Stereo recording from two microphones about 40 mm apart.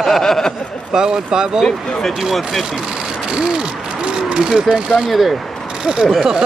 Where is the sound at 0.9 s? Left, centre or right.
Centre.